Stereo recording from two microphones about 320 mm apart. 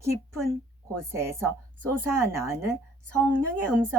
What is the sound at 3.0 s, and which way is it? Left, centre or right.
Speech, right.